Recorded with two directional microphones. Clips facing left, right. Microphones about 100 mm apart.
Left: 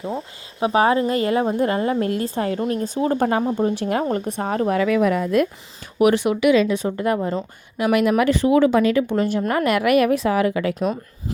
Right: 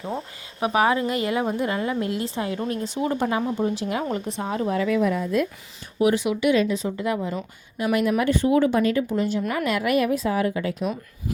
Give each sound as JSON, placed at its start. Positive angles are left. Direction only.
{"t": 0.6, "sound": "a woman's voice", "side_deg": 30}
{"t": 4.8, "sound": "a woman's voice", "side_deg": 80}
{"t": 6.4, "sound": "speech", "side_deg": 90}
{"t": 6.8, "sound": "a woman's voice", "side_deg": 55}
{"t": 7.8, "sound": "speech", "side_deg": 90}
{"t": 9.5, "sound": "a woman's voice", "side_deg": 60}